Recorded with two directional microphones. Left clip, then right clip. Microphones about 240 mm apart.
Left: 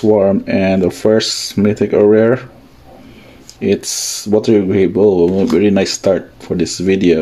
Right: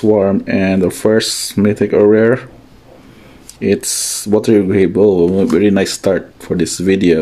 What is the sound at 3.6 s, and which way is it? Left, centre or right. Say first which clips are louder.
Speech: even; centre.